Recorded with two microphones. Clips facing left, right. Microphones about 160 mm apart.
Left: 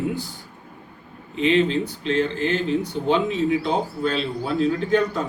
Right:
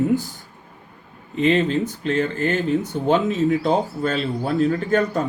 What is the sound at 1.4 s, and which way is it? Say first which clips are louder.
A man's voice: right 1 dB; 45° right (ahead or behind).